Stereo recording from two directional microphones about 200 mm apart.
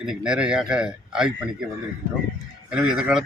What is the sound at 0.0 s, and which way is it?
Speech, 5° right (ahead or behind).